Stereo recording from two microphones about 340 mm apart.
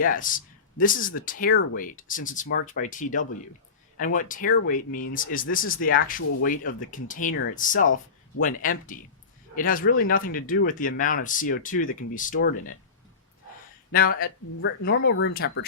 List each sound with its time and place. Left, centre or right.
0.0 s a man's voice: left
13.9 s speech: left